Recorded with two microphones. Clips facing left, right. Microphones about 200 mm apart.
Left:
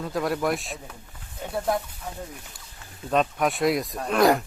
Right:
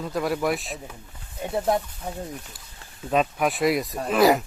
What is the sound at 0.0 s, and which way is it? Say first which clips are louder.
Speech: right 1 dB; centre (ahead or behind).